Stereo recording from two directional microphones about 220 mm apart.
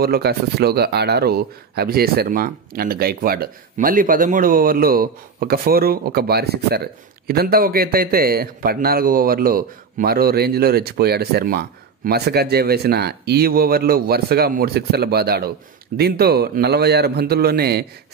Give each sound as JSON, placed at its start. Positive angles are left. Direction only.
{"t": 0.0, "sound": "speech", "side_deg": -45}